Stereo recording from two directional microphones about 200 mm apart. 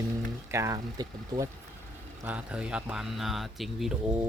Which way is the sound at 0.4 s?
15° right (ahead or behind).